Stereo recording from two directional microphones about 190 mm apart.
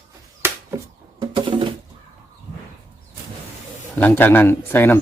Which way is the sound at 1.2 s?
25° right (ahead or behind).